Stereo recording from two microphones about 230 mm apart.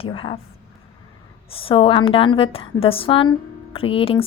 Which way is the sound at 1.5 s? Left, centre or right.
Left.